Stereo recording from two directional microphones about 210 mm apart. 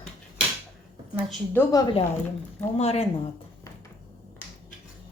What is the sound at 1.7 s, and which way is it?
Speech, 25° left (ahead or behind).